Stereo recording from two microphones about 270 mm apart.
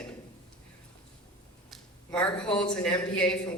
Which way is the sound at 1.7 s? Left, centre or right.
Centre.